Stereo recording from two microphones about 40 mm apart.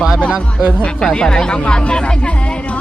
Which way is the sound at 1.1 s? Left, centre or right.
Left.